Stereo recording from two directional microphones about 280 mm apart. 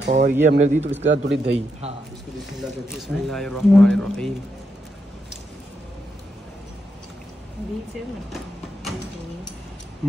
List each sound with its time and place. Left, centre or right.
0.0 s speech: right
1.0 s speech: right
2.9 s a man's voice: centre